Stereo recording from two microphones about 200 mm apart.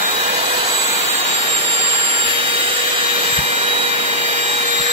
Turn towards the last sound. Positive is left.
turn(degrees=-35)  # may be behind; listen again after turning